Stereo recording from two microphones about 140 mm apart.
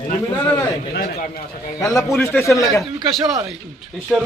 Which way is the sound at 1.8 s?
20° left (ahead or behind).